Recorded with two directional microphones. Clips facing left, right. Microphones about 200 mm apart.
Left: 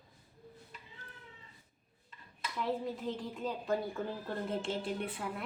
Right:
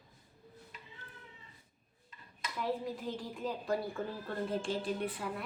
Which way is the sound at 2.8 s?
20° left (ahead or behind).